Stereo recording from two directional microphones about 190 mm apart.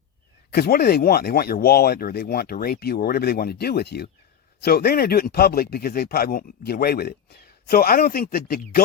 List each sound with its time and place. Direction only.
0.5 s speech: 55° left (ahead or behind)